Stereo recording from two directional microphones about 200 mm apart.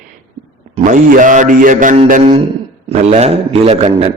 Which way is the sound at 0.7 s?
40° right (ahead or behind).